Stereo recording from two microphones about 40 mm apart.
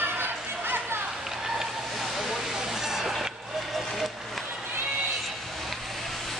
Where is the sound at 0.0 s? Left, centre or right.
Right.